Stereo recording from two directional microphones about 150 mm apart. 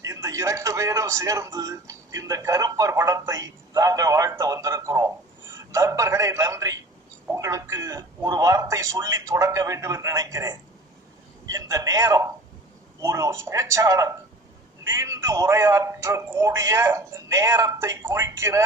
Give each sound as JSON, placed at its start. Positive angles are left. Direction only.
{"t": 0.0, "sound": "a man's voice", "side_deg": -20}